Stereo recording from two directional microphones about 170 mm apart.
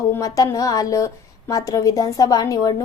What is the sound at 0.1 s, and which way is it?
A woman's voice, 20° left (ahead or behind).